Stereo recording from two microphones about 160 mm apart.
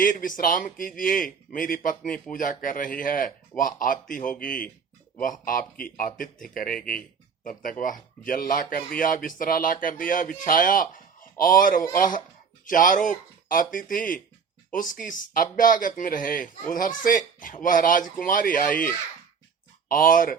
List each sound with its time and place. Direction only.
0.0 s a man's voice: 55° left (ahead or behind)
19.9 s a man's voice: 60° left (ahead or behind)